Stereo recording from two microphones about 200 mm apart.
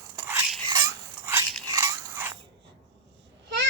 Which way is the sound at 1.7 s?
15° right (ahead or behind).